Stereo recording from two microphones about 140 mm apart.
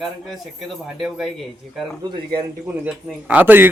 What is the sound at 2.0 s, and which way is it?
Speech, 30° right (ahead or behind).